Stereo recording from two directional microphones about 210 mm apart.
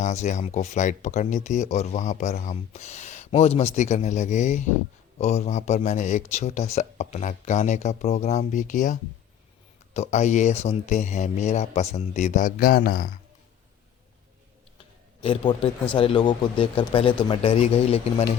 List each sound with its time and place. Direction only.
0.0 s speech: 35° left (ahead or behind)
15.2 s speech: 25° left (ahead or behind)